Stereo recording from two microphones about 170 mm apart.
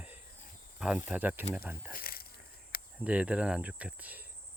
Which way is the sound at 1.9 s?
60° left (ahead or behind).